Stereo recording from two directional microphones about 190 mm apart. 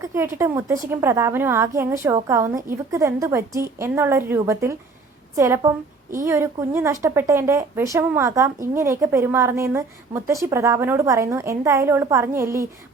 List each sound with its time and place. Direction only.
0.0 s a woman's voice: 15° right (ahead or behind)